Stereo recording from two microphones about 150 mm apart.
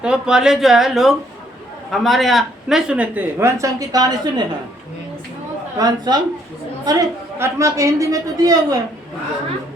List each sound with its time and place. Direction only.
0.0 s speech: 5° right (ahead or behind); by 4.4 s 25° right (ahead or behind)
5.7 s a woman's voice: 25° right (ahead or behind)